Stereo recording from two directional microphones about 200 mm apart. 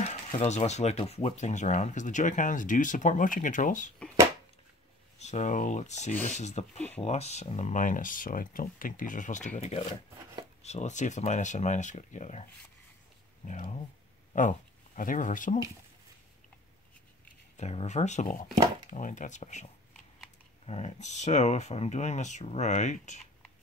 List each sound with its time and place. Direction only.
0.0 s speech: 35° left (ahead or behind)
5.2 s speech: 35° left (ahead or behind)
13.5 s speech: 35° left (ahead or behind)
17.6 s speech: 35° left (ahead or behind)